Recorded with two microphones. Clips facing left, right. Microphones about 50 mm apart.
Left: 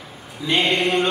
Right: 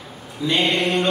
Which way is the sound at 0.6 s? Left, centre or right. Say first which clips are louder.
Left 1 dB; centre.